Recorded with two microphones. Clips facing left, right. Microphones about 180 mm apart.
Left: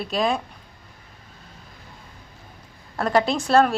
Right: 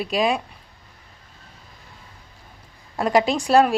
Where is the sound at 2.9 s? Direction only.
10° right (ahead or behind).